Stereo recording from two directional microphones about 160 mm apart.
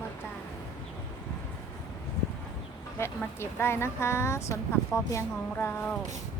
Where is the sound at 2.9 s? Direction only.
15° left (ahead or behind).